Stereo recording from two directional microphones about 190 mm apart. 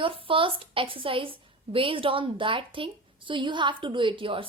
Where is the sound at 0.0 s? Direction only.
30° right (ahead or behind).